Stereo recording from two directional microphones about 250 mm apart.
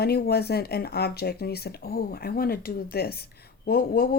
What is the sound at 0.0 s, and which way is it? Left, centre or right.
Speech, left.